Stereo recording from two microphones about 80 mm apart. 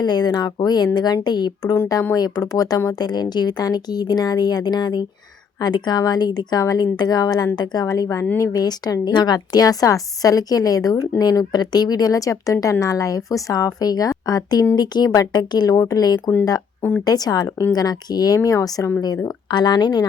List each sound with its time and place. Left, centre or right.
0.0 s speech: left
2.1 s speech: left
8.4 s a woman's voice: left
19.5 s speech: left